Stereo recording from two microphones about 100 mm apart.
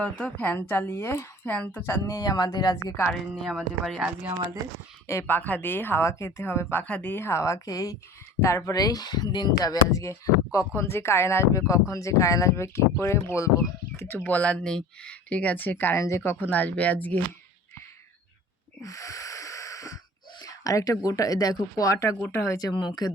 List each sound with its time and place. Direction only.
0.0 s speech: 10° left (ahead or behind)
2.0 s speech: 35° left (ahead or behind)
3.0 s speech: 10° left (ahead or behind)
5.0 s speech: 25° left (ahead or behind)
13.9 s speech: 20° left (ahead or behind)
18.8 s wheeze: 35° left (ahead or behind)
20.4 s speech: 35° left (ahead or behind)